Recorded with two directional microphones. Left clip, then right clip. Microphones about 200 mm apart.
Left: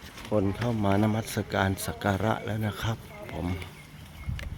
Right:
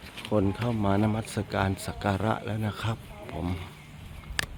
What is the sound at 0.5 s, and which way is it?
Speech, centre (ahead or behind).